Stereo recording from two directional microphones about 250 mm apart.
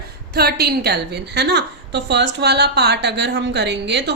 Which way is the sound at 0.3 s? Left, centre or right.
Right.